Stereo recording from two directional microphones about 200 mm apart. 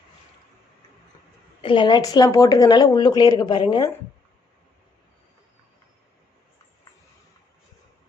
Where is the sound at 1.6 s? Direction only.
25° left (ahead or behind).